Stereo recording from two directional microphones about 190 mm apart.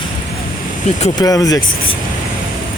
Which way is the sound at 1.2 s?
20° left (ahead or behind).